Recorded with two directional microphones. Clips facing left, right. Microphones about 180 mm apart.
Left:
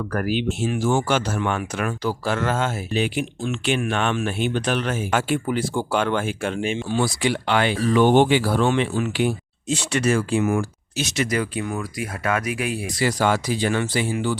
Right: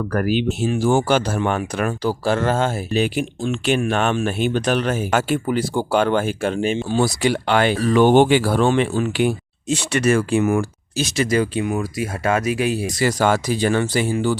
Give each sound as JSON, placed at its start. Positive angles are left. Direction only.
{"t": 0.1, "sound": "speech", "side_deg": -40}
{"t": 10.9, "sound": "speech", "side_deg": -30}
{"t": 12.9, "sound": "speech", "side_deg": -45}